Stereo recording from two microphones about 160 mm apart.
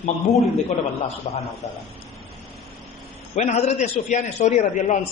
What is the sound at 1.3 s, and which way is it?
Speech, 50° left (ahead or behind).